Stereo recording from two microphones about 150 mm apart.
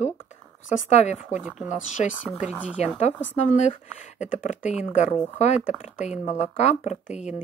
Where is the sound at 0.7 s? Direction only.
50° left (ahead or behind).